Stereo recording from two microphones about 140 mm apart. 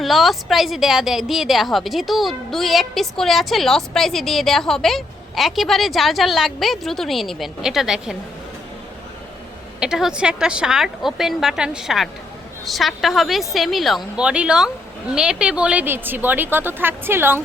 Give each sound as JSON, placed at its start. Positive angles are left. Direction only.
{"t": 0.0, "sound": "a woman's voice", "side_deg": 0}
{"t": 9.8, "sound": "a woman's voice", "side_deg": -5}